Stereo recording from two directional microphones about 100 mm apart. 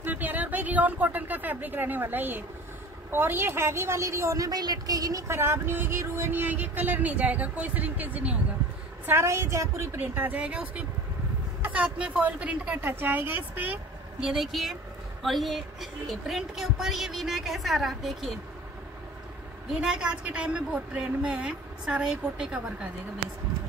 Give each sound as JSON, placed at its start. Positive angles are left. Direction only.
{"t": 0.0, "sound": "a woman's voice", "side_deg": -15}
{"t": 9.0, "sound": "a woman's voice", "side_deg": -25}
{"t": 9.9, "sound": "a woman's voice", "side_deg": -20}
{"t": 14.2, "sound": "speech", "side_deg": -5}
{"t": 19.7, "sound": "a woman's voice", "side_deg": -10}